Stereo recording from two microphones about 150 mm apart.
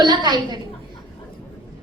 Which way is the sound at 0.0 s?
30° right (ahead or behind).